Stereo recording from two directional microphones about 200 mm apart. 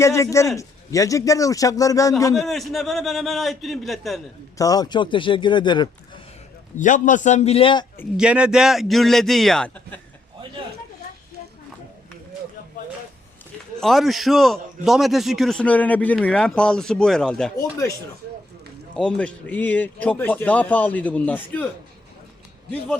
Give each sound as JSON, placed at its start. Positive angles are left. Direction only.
{"t": 0.0, "sound": "a man's voice", "side_deg": 15}
{"t": 2.3, "sound": "a man's voice", "side_deg": 0}
{"t": 4.5, "sound": "speech", "side_deg": 15}
{"t": 6.7, "sound": "a man's voice", "side_deg": 40}
{"t": 8.1, "sound": "a man's voice", "side_deg": -5}
{"t": 13.7, "sound": "a man's voice", "side_deg": 0}
{"t": 17.6, "sound": "a man's voice", "side_deg": 15}
{"t": 18.9, "sound": "a man's voice", "side_deg": 5}